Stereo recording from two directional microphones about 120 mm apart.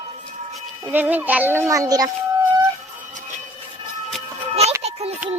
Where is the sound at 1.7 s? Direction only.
30° right (ahead or behind).